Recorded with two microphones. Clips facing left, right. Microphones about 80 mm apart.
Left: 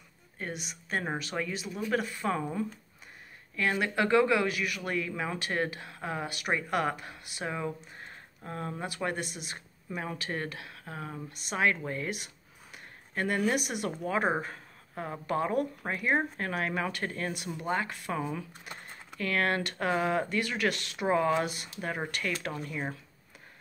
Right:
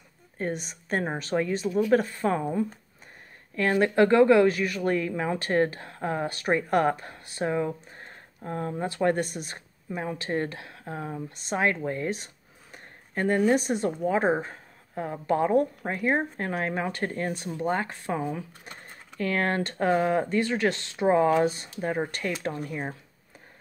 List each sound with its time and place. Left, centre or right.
0.4 s speech: right
3.8 s speech: right
9.9 s a woman's voice: right
12.7 s a sound: right
13.5 s a woman's voice: right
19.1 s speech: right